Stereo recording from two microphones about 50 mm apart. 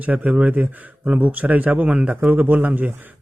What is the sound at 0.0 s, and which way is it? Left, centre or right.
Speech, right.